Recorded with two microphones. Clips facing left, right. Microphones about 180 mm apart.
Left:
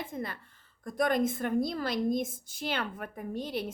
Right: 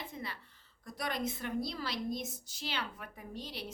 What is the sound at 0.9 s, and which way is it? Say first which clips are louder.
A woman's voice: left 10 dB; 50° left (ahead or behind).